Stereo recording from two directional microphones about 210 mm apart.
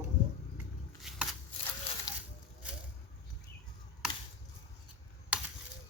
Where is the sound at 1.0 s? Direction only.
Centre (ahead or behind).